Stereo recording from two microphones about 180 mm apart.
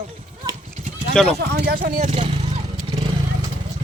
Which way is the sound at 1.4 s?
65° right (ahead or behind).